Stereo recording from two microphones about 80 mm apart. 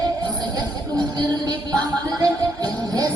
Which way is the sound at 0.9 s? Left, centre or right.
Right.